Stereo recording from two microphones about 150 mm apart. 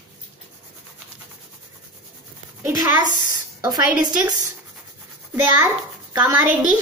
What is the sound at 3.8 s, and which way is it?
Speech, 10° right (ahead or behind).